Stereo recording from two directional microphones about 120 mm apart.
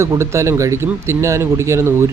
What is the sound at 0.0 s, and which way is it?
Speech, 25° right (ahead or behind).